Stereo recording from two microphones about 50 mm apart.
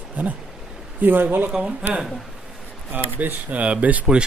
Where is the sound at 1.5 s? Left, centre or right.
Centre.